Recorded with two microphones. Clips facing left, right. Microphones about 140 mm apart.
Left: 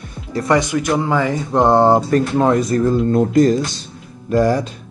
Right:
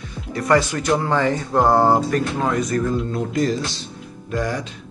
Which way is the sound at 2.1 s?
35° left (ahead or behind).